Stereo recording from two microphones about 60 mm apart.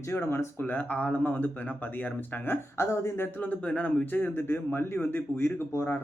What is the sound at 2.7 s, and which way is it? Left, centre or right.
Speech, left.